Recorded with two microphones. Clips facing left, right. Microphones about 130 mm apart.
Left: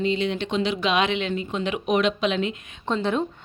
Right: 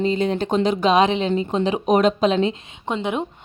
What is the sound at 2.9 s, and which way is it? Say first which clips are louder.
Speech: even; 15° right (ahead or behind).